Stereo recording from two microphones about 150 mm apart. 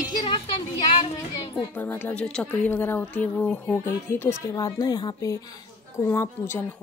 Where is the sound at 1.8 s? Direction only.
15° left (ahead or behind).